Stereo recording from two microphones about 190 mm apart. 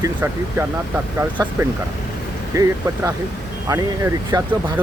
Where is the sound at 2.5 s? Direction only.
15° right (ahead or behind).